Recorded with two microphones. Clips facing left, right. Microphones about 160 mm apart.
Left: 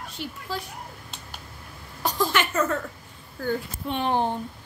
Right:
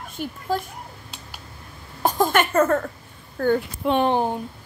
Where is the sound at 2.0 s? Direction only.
50° right (ahead or behind); by 4.0 s 70° right (ahead or behind).